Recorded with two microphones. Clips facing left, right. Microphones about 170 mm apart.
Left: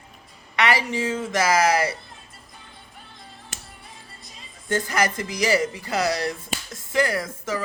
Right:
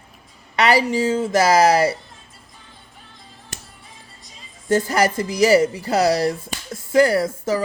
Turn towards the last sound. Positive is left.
turn(degrees=-35)  # may be behind; listen again after turning